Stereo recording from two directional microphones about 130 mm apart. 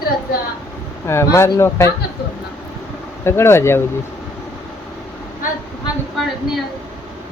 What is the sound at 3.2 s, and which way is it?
Speech, 20° left (ahead or behind).